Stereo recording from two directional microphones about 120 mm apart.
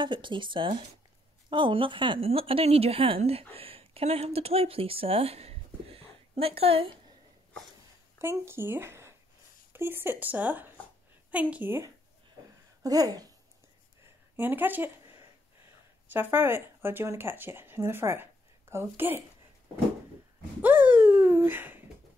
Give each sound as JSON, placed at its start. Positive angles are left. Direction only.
{"t": 0.0, "sound": "a woman's voice", "side_deg": -40}
{"t": 8.2, "sound": "speech", "side_deg": -20}
{"t": 12.8, "sound": "speech", "side_deg": -30}
{"t": 14.3, "sound": "speech", "side_deg": -15}
{"t": 16.1, "sound": "speech", "side_deg": -20}
{"t": 20.6, "sound": "a sound", "side_deg": -15}